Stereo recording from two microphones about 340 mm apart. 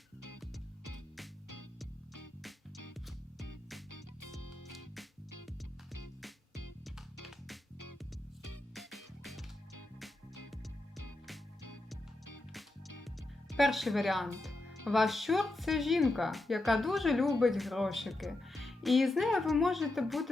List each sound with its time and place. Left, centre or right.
3.9 s music: left
7.3 s music: centre
8.7 s music: centre
13.6 s speech: centre
14.5 s music: left
14.8 s speech: centre